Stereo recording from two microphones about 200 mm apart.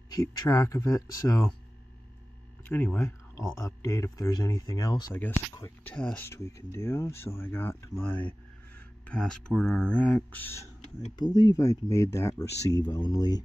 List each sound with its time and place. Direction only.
0.1 s speech: 20° left (ahead or behind)
2.6 s speech: 10° left (ahead or behind)